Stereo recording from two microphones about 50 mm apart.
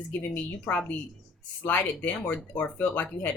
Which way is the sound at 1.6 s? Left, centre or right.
Left.